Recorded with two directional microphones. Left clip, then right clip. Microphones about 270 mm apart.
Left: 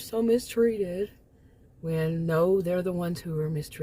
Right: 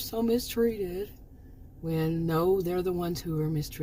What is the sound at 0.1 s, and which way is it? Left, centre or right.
Speech, centre.